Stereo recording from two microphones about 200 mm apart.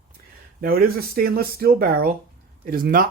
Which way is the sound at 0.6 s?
45° right (ahead or behind).